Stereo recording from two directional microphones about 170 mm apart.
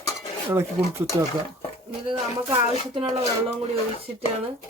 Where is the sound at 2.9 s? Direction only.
30° right (ahead or behind).